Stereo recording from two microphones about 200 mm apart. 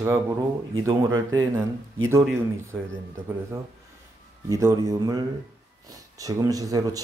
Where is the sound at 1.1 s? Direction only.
80° right.